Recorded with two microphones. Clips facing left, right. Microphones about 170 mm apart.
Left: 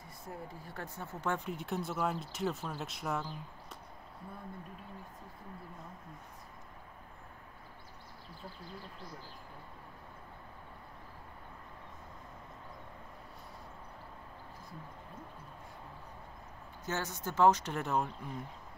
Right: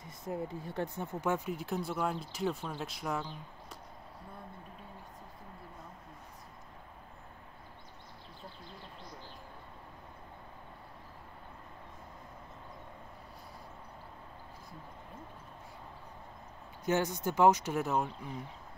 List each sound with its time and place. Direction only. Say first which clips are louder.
0.0 s speech: right 7 dB; 20° right (ahead or behind)
1.3 s speech: right 2 dB; 5° right (ahead or behind)
16.8 s speech: right 7 dB; 15° right (ahead or behind)